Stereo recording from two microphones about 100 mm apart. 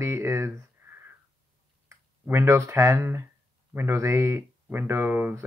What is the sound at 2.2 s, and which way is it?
Speech, 25° right (ahead or behind).